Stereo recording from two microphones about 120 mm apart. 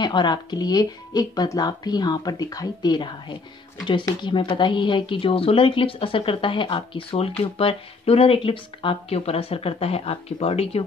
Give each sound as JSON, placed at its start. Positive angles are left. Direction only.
{"t": 0.0, "sound": "speech", "side_deg": 40}